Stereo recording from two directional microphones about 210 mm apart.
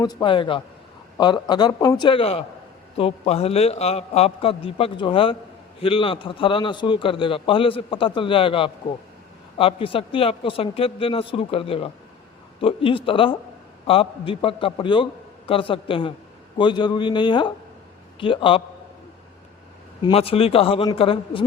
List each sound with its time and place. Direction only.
0.0 s a man's voice: 20° left (ahead or behind)
20.0 s a man's voice: 25° left (ahead or behind)